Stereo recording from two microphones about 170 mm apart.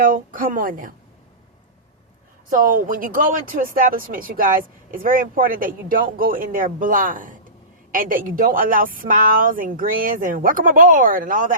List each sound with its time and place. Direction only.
0.0 s speech: 55° right (ahead or behind)
2.5 s speech: 55° right (ahead or behind)